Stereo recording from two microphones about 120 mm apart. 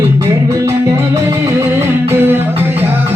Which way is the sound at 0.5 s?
25° right (ahead or behind).